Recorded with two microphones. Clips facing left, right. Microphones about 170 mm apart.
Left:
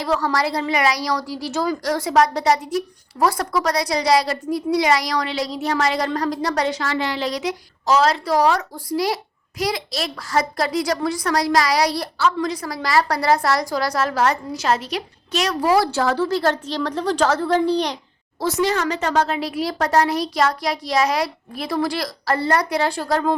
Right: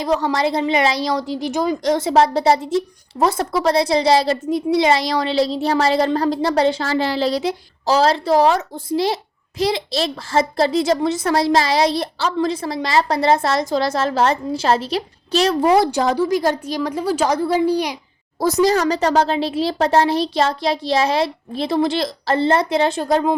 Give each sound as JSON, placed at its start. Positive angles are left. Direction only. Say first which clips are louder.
{"t": 0.0, "sound": "a woman's voice", "louder": "right 3 dB", "side_deg": -20}
{"t": 18.3, "sound": "a woman's voice", "louder": "right 5 dB", "side_deg": -40}